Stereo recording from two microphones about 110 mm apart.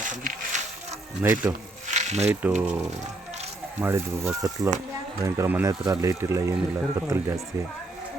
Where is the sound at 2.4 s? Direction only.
15° right (ahead or behind).